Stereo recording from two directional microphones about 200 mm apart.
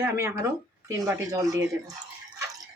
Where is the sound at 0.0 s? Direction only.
15° right (ahead or behind).